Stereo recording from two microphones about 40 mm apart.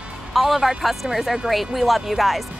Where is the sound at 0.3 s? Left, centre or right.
Centre.